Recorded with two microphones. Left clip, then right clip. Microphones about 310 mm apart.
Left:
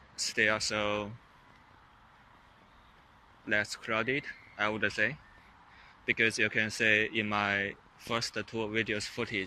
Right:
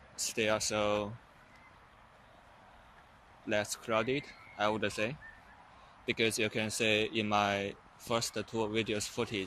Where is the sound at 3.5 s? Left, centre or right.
Centre.